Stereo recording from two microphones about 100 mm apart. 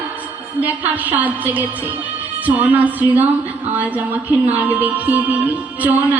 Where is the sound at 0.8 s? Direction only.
15° right (ahead or behind).